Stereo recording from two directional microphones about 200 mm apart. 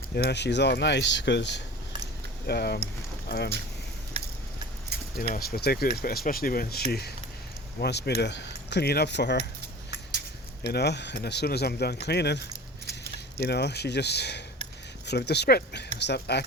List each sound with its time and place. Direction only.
0.2 s speech: 55° left (ahead or behind)
4.1 s a sound: 30° right (ahead or behind)
4.9 s keys jangling: 55° right (ahead or behind)
5.3 s speech: 50° left (ahead or behind)
10.6 s speech: 55° left (ahead or behind)
13.5 s speech: 55° left (ahead or behind)